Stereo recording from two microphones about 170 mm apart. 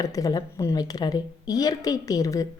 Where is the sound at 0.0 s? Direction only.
20° left (ahead or behind).